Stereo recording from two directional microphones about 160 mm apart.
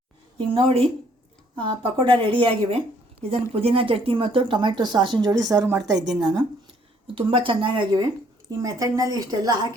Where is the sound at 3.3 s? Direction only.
40° right (ahead or behind).